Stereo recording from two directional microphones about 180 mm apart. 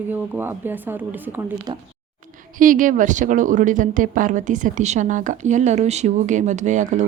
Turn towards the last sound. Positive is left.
turn(degrees=-45)  # may be behind; listen again after turning